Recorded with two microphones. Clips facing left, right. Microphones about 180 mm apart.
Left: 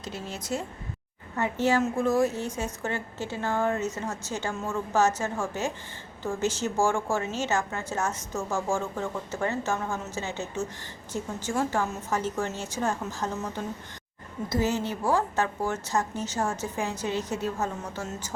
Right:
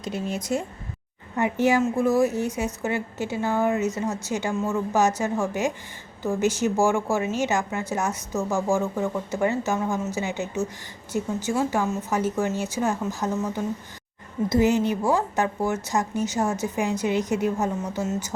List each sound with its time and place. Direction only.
0.0 s a woman's voice: 15° right (ahead or behind)